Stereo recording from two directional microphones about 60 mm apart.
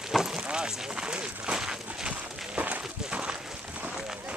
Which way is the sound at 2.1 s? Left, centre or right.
Right.